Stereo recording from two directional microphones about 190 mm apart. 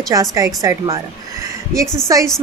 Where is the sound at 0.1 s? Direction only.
20° right (ahead or behind).